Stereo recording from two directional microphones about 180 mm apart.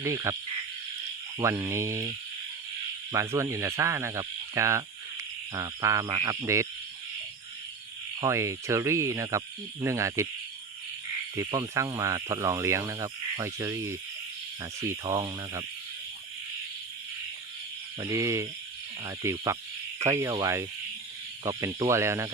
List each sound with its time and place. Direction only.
0.0 s speech: 15° right (ahead or behind)
1.4 s speech: 15° right (ahead or behind)
8.2 s speech: 15° right (ahead or behind)
11.3 s speech: 15° right (ahead or behind)
18.0 s speech: 15° right (ahead or behind)